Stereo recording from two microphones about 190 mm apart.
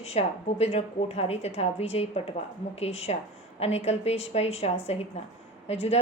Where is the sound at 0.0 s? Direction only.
35° left (ahead or behind).